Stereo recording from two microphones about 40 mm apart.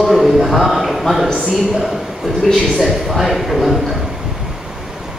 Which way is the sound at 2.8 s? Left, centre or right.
Centre.